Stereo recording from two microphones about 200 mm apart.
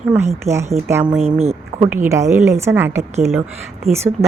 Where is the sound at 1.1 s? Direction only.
30° right (ahead or behind).